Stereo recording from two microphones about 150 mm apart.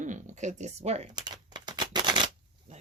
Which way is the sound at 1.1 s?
30° right (ahead or behind).